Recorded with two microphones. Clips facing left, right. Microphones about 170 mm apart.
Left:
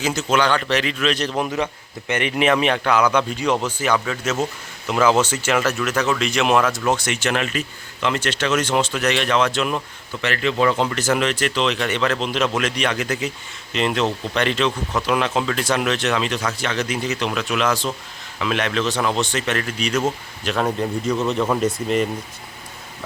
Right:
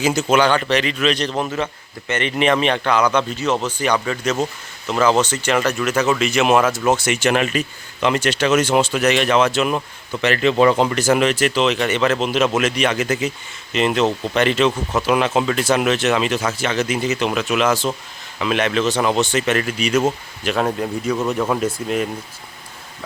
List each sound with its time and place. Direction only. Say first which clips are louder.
0.0 s a man's voice: right 4 dB; 10° right (ahead or behind)
10.2 s a man's voice: right 5 dB; 20° right (ahead or behind); by 22.1 s centre (ahead or behind)